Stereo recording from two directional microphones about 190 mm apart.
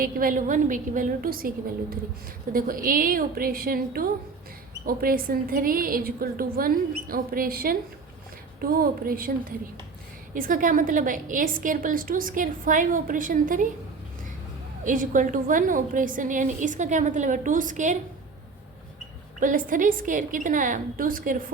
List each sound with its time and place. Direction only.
0.0 s a woman's voice: 45° right (ahead or behind)
10.3 s a woman's voice: 45° right (ahead or behind)
14.8 s a woman's voice: 45° right (ahead or behind)
19.4 s a woman's voice: 45° right (ahead or behind)